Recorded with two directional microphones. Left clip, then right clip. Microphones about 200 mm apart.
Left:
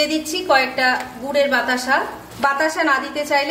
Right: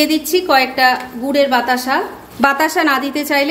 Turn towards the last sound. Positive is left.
turn(degrees=-40)  # may be behind; listen again after turning